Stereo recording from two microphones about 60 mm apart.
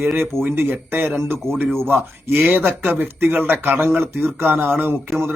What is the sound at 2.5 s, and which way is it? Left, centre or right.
A man's voice, right.